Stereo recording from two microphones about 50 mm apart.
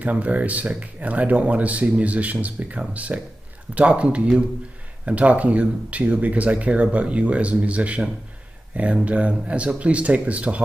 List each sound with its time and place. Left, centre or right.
0.0 s speech: right